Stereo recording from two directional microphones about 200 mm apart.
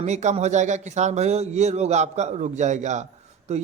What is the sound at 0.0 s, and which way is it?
A man's voice, 35° right (ahead or behind).